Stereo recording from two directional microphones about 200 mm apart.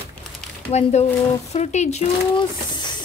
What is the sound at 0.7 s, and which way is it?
A woman's voice, 35° left (ahead or behind).